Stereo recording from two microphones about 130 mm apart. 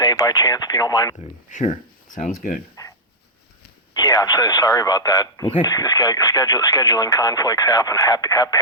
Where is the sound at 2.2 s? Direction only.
80° left.